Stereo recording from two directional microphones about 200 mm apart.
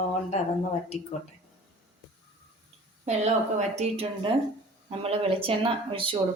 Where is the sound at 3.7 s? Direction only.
30° right (ahead or behind).